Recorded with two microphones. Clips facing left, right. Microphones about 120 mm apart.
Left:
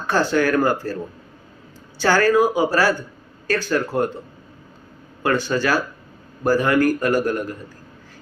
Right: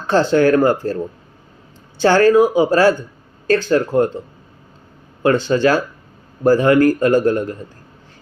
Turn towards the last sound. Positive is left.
turn(degrees=-25)  # may be behind; listen again after turning